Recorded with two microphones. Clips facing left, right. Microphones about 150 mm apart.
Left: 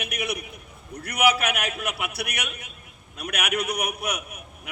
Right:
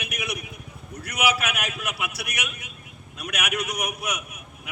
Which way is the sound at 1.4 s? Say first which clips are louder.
Left 2 dB; 35° left (ahead or behind).